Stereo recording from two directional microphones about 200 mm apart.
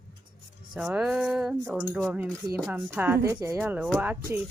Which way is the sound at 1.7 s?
10° right (ahead or behind).